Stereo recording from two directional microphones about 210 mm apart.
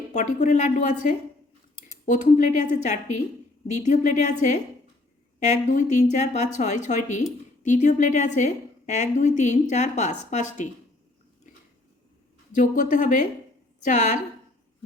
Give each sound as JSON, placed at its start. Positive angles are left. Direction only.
{"t": 0.1, "sound": "a woman's voice", "side_deg": 35}
{"t": 12.5, "sound": "a woman's voice", "side_deg": 35}